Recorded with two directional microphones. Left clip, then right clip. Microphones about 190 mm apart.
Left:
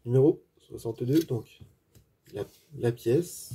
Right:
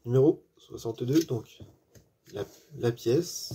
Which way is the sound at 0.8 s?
20° left (ahead or behind).